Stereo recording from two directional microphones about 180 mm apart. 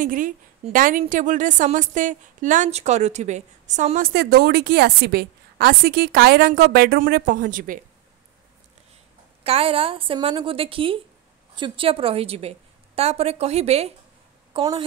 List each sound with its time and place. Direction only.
0.0 s a woman's voice: 50° right (ahead or behind)
4.1 s a woman's voice: 60° right (ahead or behind)
9.4 s a woman's voice: 35° right (ahead or behind)
14.5 s speech: 25° right (ahead or behind)